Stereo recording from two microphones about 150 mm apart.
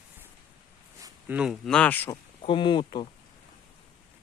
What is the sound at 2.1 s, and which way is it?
Speech, 35° left (ahead or behind).